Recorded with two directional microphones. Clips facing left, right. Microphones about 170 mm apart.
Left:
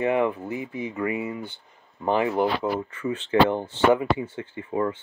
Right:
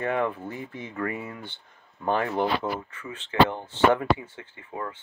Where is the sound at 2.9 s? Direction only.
30° left (ahead or behind).